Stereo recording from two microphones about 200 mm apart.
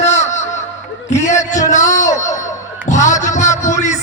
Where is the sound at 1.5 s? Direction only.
35° left (ahead or behind).